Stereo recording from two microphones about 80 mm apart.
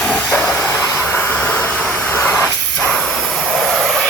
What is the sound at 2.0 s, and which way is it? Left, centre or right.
Train, centre.